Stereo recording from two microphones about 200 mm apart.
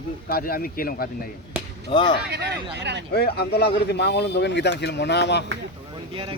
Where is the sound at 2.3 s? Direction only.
55° right (ahead or behind).